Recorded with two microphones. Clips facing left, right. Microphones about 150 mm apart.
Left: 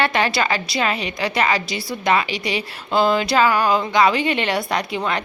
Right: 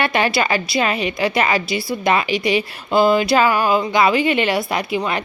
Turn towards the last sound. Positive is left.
turn(degrees=-5)  # may be behind; listen again after turning